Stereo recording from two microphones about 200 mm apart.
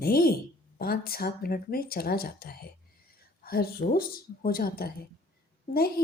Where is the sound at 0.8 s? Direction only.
50° left (ahead or behind).